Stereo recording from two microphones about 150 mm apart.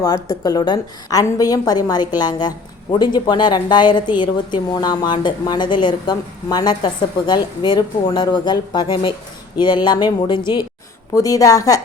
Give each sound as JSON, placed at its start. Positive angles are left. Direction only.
{"t": 0.0, "sound": "a woman's voice", "side_deg": 25}